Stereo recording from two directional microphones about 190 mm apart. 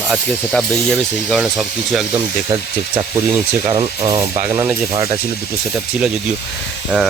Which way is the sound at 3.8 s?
15° right (ahead or behind).